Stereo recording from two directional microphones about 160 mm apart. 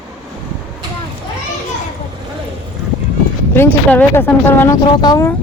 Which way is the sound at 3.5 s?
15° left (ahead or behind).